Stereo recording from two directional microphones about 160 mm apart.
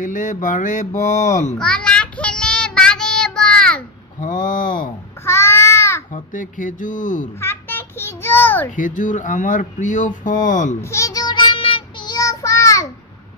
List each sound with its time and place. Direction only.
0.0 s speech: 55° left (ahead or behind)
1.6 s child singing: 5° left (ahead or behind)
4.2 s speech: 55° left (ahead or behind)
5.2 s babbling: 15° left (ahead or behind)
6.3 s speech: 55° left (ahead or behind)
7.3 s a sound: 15° left (ahead or behind)
8.7 s speech: 55° left (ahead or behind)
10.8 s child singing: 20° left (ahead or behind)